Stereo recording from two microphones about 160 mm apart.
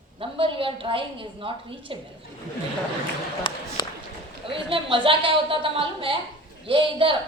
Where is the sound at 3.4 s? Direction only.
35° left (ahead or behind).